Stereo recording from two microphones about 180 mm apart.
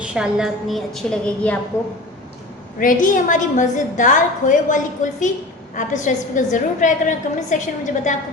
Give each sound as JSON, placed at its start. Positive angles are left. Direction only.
{"t": 0.0, "sound": "a woman's voice", "side_deg": -5}
{"t": 2.7, "sound": "a woman's voice", "side_deg": 50}